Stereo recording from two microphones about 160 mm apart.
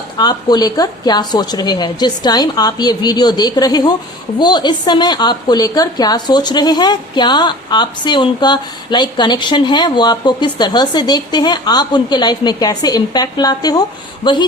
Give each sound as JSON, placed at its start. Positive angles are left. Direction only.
{"t": 0.2, "sound": "a woman's voice", "side_deg": 25}